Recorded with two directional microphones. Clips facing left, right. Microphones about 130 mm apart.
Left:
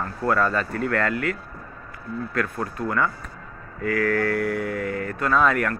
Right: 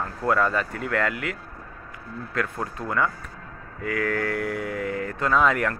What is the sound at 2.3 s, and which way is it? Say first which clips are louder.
A man's voice: left 1 dB; 20° right (ahead or behind).